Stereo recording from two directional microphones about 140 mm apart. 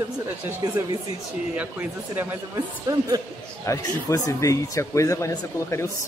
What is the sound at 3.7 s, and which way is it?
Speech, 25° left (ahead or behind).